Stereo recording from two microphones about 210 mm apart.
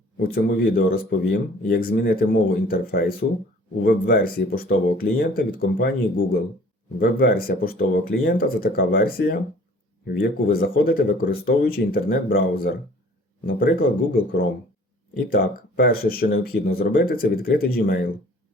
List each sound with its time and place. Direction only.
0.2 s speech: 45° left (ahead or behind)
15.3 s speech: 45° left (ahead or behind)